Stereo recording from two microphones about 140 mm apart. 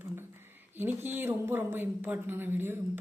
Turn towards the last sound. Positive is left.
turn(degrees=-15)  # may be behind; listen again after turning